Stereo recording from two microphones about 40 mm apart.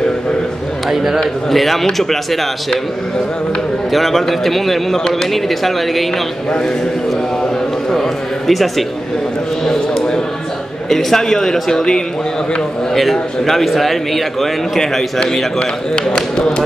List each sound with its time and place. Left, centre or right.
0.8 s speech: centre
1.5 s a man's voice: centre
3.9 s a man's voice: centre
7.9 s a sound: centre
9.7 s a sound: centre
10.9 s a man's voice: centre
15.9 s speech: centre